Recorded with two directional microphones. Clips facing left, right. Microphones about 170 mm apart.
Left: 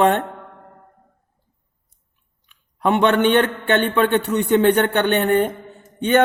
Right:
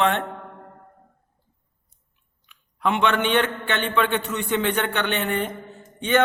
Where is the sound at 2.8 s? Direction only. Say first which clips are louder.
Left 6 dB; 45° left (ahead or behind).